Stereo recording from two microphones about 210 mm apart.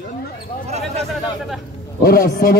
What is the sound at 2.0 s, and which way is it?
Speech, 45° left (ahead or behind).